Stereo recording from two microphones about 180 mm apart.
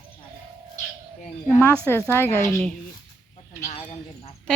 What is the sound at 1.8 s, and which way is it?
Speech, 15° left (ahead or behind).